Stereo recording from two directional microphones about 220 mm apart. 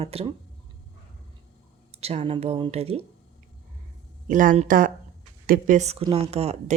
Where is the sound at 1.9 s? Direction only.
30° right (ahead or behind).